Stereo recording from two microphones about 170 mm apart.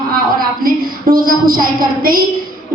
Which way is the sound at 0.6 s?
55° right (ahead or behind).